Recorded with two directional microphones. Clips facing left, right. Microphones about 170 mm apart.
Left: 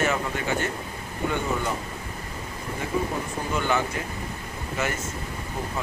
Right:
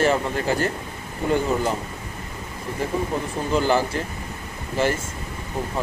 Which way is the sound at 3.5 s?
35° right (ahead or behind).